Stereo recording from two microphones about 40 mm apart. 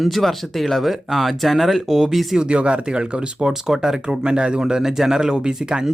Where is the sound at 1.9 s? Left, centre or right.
Centre.